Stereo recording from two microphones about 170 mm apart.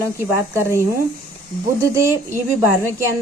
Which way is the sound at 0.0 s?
15° right (ahead or behind).